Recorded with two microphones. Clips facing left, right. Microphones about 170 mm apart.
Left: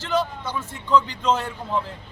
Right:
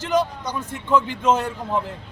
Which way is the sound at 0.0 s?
15° right (ahead or behind).